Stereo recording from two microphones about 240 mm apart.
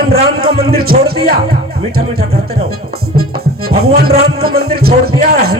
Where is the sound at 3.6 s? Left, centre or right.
Right.